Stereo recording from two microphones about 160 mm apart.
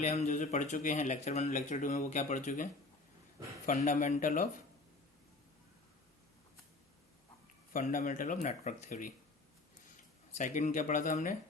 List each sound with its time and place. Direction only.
0.0 s speech: 45° left (ahead or behind)
3.8 s speech: 55° left (ahead or behind)
7.7 s speech: 60° left (ahead or behind)
10.3 s speech: 50° left (ahead or behind)